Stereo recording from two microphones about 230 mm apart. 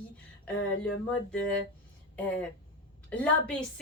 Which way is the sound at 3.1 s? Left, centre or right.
Centre.